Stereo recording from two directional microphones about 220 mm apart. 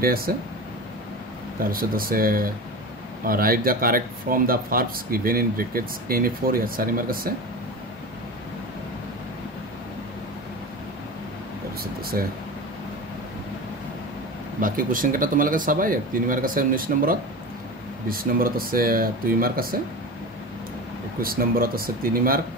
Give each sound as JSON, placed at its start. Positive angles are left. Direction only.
{"t": 0.0, "sound": "speech", "side_deg": -40}
{"t": 1.7, "sound": "speech", "side_deg": -40}
{"t": 11.8, "sound": "air conditioning", "side_deg": -40}
{"t": 14.6, "sound": "speech", "side_deg": -40}
{"t": 21.2, "sound": "speech", "side_deg": -40}